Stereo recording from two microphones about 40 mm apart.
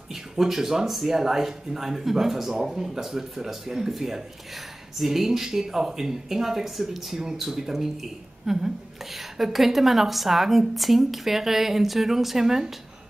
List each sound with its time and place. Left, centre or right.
0.1 s speech: centre